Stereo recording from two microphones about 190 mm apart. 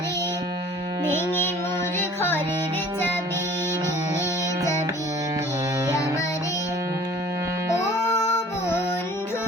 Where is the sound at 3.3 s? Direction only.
10° right (ahead or behind).